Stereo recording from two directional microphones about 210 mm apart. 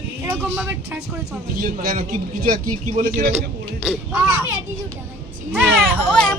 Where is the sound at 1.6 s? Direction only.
40° right (ahead or behind).